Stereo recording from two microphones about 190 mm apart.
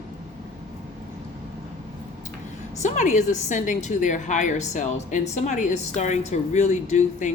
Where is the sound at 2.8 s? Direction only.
40° left (ahead or behind).